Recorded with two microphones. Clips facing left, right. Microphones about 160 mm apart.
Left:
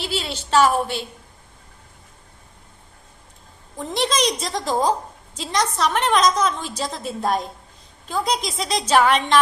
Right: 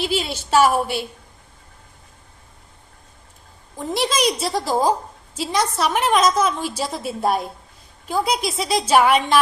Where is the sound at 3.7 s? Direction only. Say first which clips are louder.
Right 1 dB; 5° right (ahead or behind).